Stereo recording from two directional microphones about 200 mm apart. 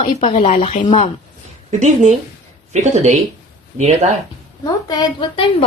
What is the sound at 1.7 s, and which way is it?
Speech, 35° right (ahead or behind).